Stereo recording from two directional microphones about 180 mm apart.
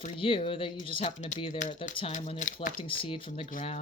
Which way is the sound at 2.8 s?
30° left (ahead or behind).